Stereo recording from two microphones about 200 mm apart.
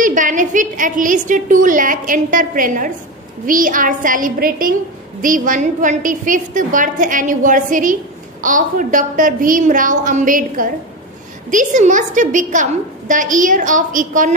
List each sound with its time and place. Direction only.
0.0 s a woman's voice: 40° right (ahead or behind)